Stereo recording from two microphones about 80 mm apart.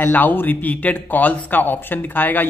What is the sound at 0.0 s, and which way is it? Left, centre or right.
Speech, left.